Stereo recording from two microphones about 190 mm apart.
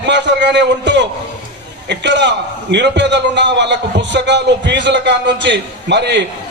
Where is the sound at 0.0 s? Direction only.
65° right (ahead or behind).